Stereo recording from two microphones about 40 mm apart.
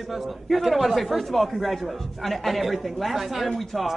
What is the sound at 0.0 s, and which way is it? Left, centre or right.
Speech, centre.